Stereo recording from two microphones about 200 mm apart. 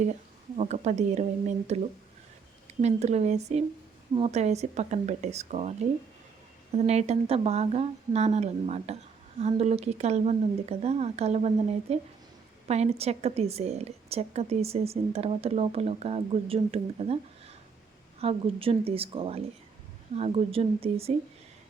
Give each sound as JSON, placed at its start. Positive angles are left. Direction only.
{"t": 0.5, "sound": "a woman's voice", "side_deg": -35}
{"t": 6.7, "sound": "a woman's voice", "side_deg": -35}
{"t": 18.2, "sound": "speech", "side_deg": -30}